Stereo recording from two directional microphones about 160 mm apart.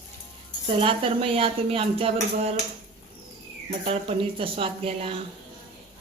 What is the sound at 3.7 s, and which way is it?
Speech, 35° right (ahead or behind).